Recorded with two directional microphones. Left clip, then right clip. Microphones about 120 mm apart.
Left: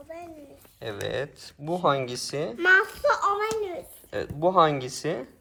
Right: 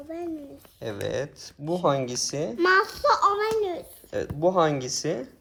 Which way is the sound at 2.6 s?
90° right.